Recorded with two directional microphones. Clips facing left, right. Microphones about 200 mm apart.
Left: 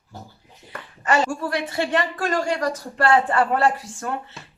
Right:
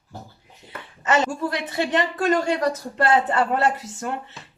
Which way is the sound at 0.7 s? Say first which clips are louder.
Even; 20° right (ahead or behind).